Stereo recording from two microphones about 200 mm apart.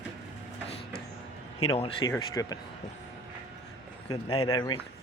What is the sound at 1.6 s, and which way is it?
Speech, 30° left (ahead or behind).